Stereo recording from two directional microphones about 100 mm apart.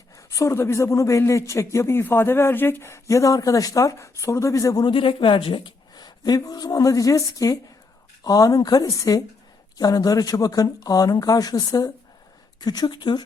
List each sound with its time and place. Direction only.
0.2 s speech: 30° left (ahead or behind)
4.9 s a woman's voice: 60° left (ahead or behind)